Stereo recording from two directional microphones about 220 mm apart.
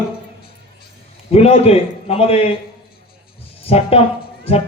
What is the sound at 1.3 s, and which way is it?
Speech, 25° left (ahead or behind).